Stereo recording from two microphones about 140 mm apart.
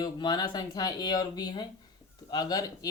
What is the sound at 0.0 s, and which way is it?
Speech, 30° left (ahead or behind).